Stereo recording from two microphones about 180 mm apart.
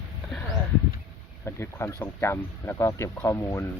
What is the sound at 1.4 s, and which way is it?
Speech, 15° left (ahead or behind).